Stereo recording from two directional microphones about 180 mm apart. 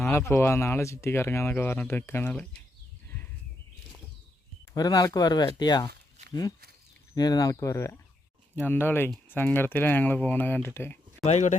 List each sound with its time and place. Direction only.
0.0 s speech: 15° left (ahead or behind)
4.7 s speech: 20° left (ahead or behind)
7.2 s speech: 20° left (ahead or behind)
11.2 s speech: 40° left (ahead or behind)